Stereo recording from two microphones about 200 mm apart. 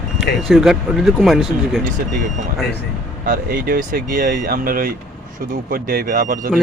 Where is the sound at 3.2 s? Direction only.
50° right (ahead or behind).